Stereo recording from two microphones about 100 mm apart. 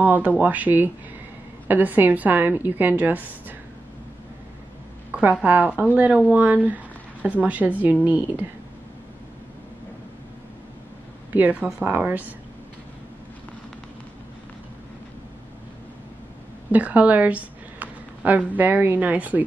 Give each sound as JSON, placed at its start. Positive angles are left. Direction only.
{"t": 0.0, "sound": "a woman's voice", "side_deg": -15}
{"t": 5.1, "sound": "a woman's voice", "side_deg": -15}
{"t": 11.3, "sound": "a woman's voice", "side_deg": -15}
{"t": 16.7, "sound": "a sound", "side_deg": -15}
{"t": 18.6, "sound": "a woman's voice", "side_deg": -20}